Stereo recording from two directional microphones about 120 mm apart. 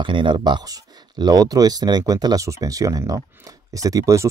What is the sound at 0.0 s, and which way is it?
Speech, 40° right (ahead or behind).